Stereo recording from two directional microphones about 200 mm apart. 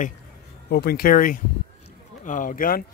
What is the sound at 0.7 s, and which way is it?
Speech, 50° left (ahead or behind).